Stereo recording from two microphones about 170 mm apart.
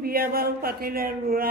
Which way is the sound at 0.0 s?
60° right (ahead or behind).